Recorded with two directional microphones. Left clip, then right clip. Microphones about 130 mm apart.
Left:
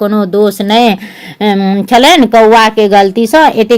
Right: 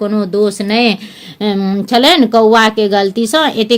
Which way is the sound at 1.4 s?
30° left (ahead or behind).